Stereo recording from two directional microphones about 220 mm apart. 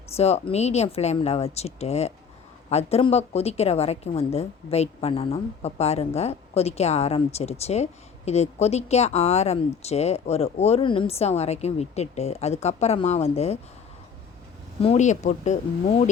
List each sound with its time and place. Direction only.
0.2 s a woman's voice: 30° left (ahead or behind)
14.8 s speech: 30° left (ahead or behind)